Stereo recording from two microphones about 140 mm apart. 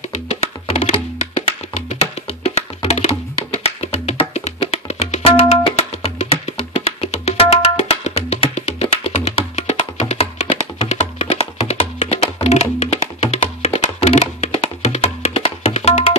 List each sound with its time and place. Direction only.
0.1 s music: 55° left (ahead or behind)
0.7 s music: 40° left (ahead or behind)
2.4 s music: 50° left (ahead or behind)